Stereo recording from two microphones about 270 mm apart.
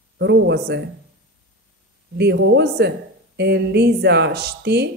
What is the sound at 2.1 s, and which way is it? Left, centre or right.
Speech, right.